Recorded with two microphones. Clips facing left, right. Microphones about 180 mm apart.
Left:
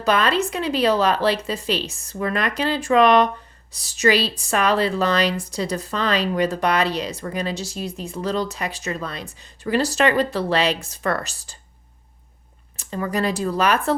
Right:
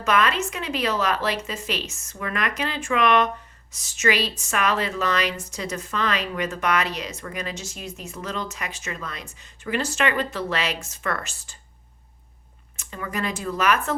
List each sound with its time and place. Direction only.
0.0 s speech: 30° left (ahead or behind)
12.7 s speech: 35° left (ahead or behind)